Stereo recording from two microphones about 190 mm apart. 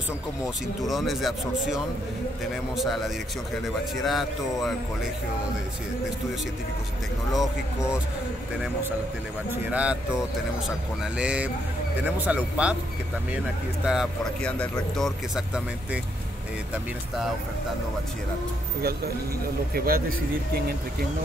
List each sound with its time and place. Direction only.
0.8 s speech: centre (ahead or behind)
9.5 s a man's voice: 5° right (ahead or behind)
11.1 s a man's voice: 5° right (ahead or behind)
13.8 s speech: centre (ahead or behind)
19.7 s speech: 50° right (ahead or behind)